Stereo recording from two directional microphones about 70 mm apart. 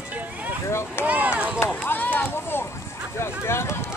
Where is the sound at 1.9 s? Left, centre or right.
Left.